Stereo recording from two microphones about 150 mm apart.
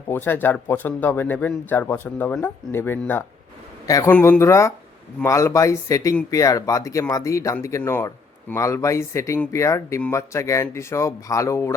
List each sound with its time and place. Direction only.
0.1 s speech: 15° left (ahead or behind)